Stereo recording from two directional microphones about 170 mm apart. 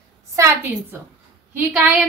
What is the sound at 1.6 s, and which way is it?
Speech, 10° right (ahead or behind).